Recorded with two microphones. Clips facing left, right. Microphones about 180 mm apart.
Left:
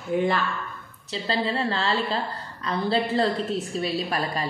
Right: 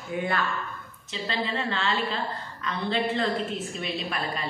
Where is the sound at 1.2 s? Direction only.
35° left (ahead or behind).